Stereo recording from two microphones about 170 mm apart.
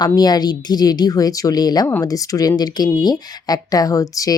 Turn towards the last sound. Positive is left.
turn(degrees=20)  # may be behind; listen again after turning